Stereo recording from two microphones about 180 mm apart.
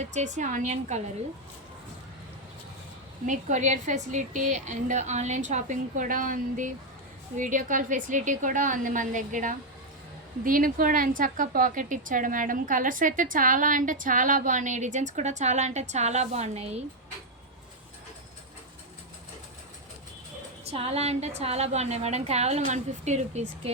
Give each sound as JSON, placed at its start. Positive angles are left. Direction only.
{"t": 0.0, "sound": "a woman's voice", "side_deg": -40}
{"t": 3.2, "sound": "a woman's voice", "side_deg": -40}
{"t": 20.7, "sound": "a woman's voice", "side_deg": -35}